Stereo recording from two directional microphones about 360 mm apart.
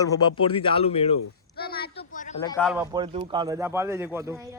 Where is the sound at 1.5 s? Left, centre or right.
Left.